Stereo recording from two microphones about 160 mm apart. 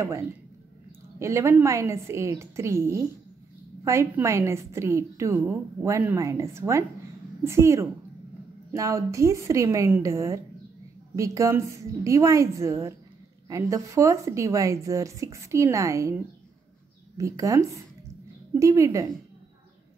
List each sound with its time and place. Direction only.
1.2 s a woman's voice: 15° right (ahead or behind)
17.2 s speech: 20° right (ahead or behind)